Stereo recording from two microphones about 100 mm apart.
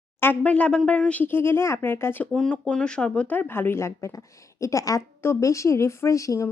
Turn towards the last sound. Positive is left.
turn(degrees=30)  # may be behind; listen again after turning